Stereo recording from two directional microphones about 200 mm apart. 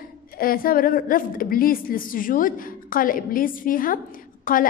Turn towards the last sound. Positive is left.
turn(degrees=45)  # may be behind; listen again after turning